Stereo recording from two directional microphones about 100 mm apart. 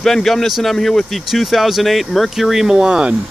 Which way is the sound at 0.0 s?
5° left (ahead or behind).